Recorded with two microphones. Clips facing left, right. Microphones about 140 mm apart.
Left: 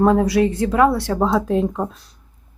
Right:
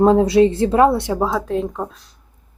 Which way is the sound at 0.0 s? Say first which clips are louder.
Right 3 dB; 25° right (ahead or behind).